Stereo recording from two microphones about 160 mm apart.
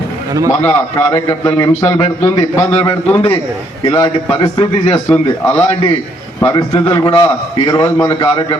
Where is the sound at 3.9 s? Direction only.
20° left (ahead or behind).